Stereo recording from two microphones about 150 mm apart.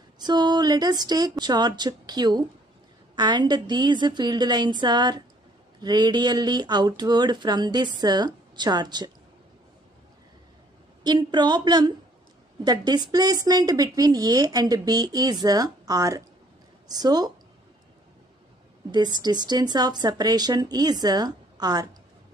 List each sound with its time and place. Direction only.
0.2 s speech: 30° right (ahead or behind)
11.1 s speech: 30° right (ahead or behind)
18.9 s speech: 30° right (ahead or behind)